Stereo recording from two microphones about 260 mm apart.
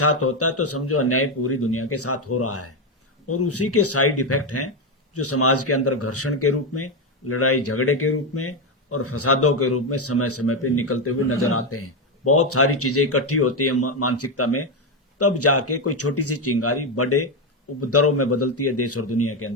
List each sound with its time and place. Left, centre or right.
0.0 s speech: left